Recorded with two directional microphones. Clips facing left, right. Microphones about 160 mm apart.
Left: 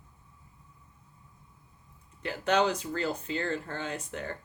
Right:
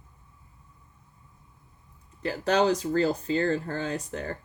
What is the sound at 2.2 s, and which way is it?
Speech, 35° right (ahead or behind).